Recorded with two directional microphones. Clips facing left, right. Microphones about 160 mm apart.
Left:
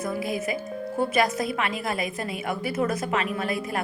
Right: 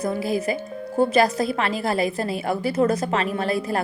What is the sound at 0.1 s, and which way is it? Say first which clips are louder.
A woman's voice: right 4 dB; 30° right (ahead or behind).